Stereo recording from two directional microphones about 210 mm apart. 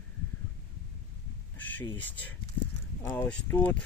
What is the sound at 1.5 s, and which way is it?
Speech, 10° left (ahead or behind).